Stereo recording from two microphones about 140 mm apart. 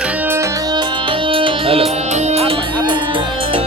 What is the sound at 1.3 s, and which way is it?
Music, 40° right (ahead or behind).